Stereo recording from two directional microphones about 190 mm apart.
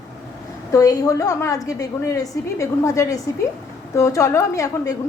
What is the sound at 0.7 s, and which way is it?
A woman's voice, 20° left (ahead or behind).